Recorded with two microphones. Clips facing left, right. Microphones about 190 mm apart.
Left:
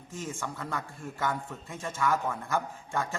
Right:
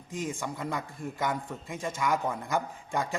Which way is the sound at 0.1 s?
15° right (ahead or behind).